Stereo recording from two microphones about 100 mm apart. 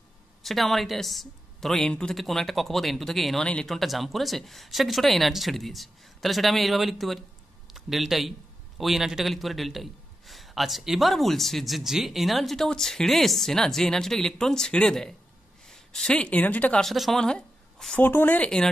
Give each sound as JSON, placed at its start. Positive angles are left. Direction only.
{"t": 0.4, "sound": "a man's voice", "side_deg": 0}
{"t": 16.8, "sound": "speech", "side_deg": 0}
{"t": 17.9, "sound": "speech", "side_deg": 20}